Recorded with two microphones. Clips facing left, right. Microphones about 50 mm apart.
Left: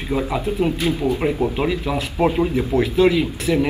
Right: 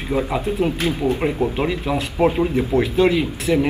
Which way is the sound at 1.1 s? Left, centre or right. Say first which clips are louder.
Even; centre.